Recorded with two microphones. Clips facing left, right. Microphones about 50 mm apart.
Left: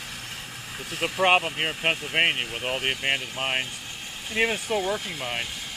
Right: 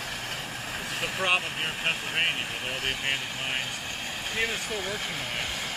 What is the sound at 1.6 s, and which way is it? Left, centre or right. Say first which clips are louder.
Speech: left 3 dB; left.